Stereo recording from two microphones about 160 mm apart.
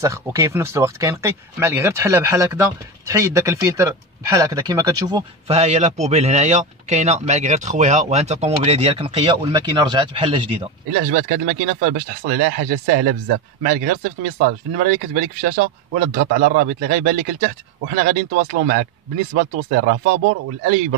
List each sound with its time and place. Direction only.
0.0 s speech: 20° right (ahead or behind)
5.5 s a man's voice: 40° right (ahead or behind)
10.9 s speech: 65° right (ahead or behind)